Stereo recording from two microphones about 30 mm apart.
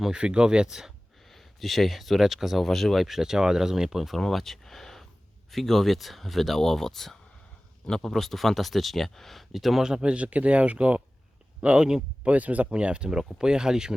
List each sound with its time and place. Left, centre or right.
0.1 s speech: right
1.3 s speech: centre
2.6 s speech: centre
2.9 s speech: centre
4.2 s speech: centre
9.5 s speech: centre
10.0 s speech: right
11.6 s speech: right
12.2 s speech: right
12.7 s speech: right